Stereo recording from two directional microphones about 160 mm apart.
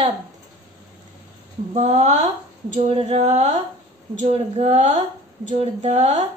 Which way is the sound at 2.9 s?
35° right (ahead or behind).